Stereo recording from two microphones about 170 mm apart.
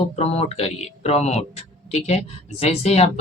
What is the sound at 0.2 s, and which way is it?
Speech, 35° left (ahead or behind).